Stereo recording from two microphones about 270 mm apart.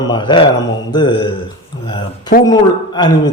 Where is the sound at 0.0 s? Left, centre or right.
Centre.